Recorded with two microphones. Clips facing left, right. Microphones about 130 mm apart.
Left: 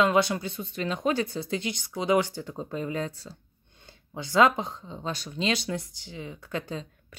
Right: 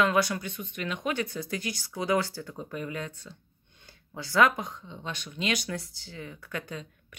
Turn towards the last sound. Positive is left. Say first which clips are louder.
# left 4 dB
turn(degrees=25)  # may be behind; listen again after turning